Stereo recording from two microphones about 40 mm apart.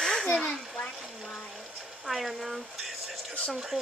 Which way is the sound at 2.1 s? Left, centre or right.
Centre.